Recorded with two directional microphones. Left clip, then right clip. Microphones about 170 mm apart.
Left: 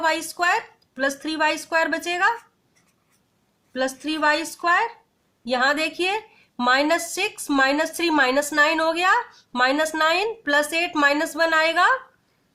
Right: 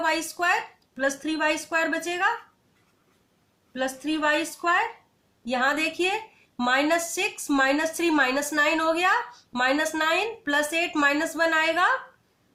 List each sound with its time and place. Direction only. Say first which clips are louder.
0.0 s speech: left 3 dB; 40° left (ahead or behind)
3.7 s speech: left 3 dB; 40° left (ahead or behind)